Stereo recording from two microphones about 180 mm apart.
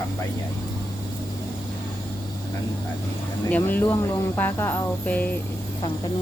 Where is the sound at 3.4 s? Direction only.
10° left (ahead or behind).